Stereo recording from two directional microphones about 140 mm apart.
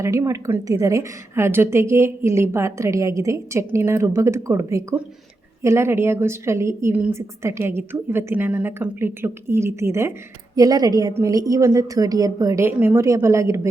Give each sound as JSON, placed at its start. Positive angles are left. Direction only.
{"t": 0.0, "sound": "a woman's voice", "side_deg": -20}